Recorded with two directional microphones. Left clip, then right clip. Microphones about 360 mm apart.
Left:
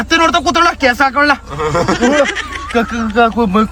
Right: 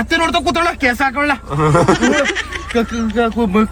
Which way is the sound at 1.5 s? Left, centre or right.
Centre.